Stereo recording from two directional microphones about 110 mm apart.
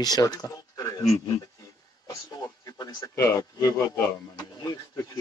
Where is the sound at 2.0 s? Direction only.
35° left (ahead or behind).